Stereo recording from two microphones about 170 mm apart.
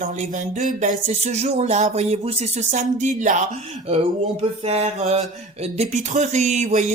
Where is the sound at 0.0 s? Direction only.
45° right (ahead or behind).